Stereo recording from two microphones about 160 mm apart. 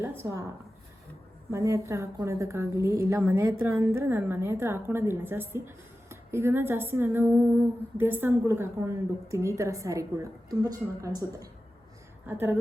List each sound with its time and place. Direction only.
0.0 s speech: 15° right (ahead or behind)
1.5 s a woman's voice: 20° right (ahead or behind)